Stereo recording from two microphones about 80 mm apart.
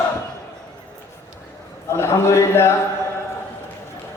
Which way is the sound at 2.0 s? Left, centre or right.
Left.